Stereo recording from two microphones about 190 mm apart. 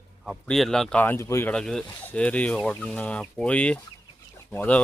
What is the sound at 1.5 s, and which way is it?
Speech, 5° left (ahead or behind).